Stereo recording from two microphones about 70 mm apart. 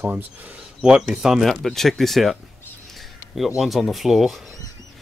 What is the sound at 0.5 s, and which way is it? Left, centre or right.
Speech, centre.